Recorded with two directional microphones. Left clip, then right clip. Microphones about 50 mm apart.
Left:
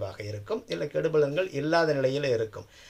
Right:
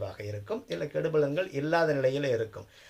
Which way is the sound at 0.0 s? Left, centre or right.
Left.